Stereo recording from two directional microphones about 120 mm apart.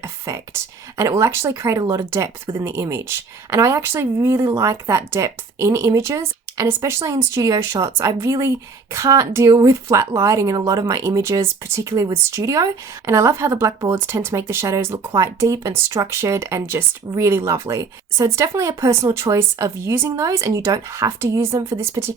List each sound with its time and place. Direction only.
0.0 s whispering: 25° right (ahead or behind)
0.9 s speech: 25° right (ahead or behind)